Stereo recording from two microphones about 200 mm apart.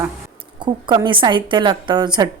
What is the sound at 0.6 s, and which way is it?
A woman's voice, 25° right (ahead or behind).